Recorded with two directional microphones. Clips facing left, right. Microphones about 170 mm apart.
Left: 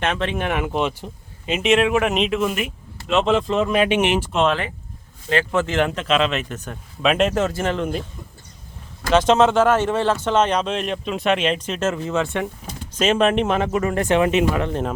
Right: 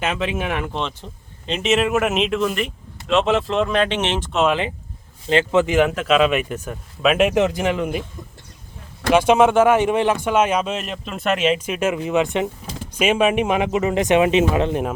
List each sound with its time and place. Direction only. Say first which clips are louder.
0.0 s speech: even; 5° right (ahead or behind)
5.3 s speech: right 4 dB; 20° right (ahead or behind)
9.1 s speech: right 1 dB; 10° right (ahead or behind)